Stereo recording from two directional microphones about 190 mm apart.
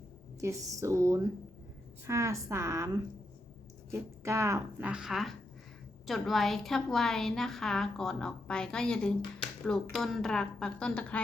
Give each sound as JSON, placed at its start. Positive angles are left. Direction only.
{"t": 0.3, "sound": "a woman's voice", "side_deg": -15}